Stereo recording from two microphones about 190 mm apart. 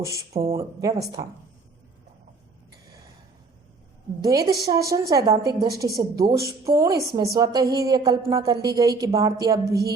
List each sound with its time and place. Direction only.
0.0 s a woman's voice: 15° right (ahead or behind)
0.3 s a woman's voice: 30° right (ahead or behind)
0.8 s a woman's voice: 20° right (ahead or behind)
4.2 s a woman's voice: 20° right (ahead or behind)